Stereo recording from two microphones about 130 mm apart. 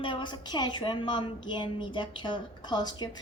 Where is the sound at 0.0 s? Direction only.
40° left (ahead or behind).